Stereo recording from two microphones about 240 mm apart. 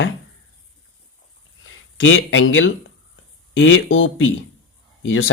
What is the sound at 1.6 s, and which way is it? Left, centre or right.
Speech, left.